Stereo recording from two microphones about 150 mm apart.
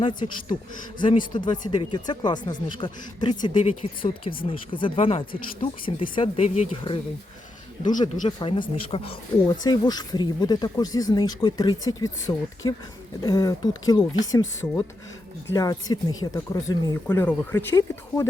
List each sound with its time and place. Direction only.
0.0 s speech: 30° left (ahead or behind)
8.0 s speech: 30° left (ahead or behind)
9.5 s speech: 25° left (ahead or behind)